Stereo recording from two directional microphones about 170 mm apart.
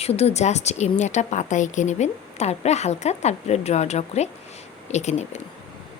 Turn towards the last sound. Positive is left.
turn(degrees=40)  # may be behind; listen again after turning